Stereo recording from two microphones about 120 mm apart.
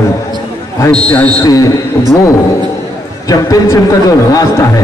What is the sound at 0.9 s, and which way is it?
Speech, 10° left (ahead or behind).